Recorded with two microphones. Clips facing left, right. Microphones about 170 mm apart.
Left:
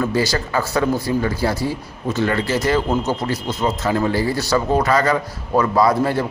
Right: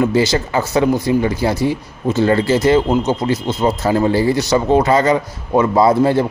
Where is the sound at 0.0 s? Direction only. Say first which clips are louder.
Right 5 dB; 20° right (ahead or behind).